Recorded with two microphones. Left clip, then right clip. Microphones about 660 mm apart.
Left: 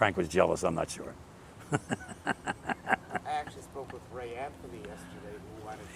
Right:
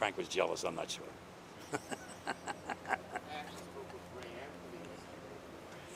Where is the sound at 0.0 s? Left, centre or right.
Left.